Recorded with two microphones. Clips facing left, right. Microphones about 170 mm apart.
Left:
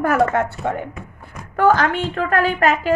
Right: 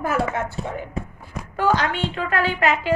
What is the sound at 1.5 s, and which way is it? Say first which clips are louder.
Speech: left 5 dB; 50° left (ahead or behind).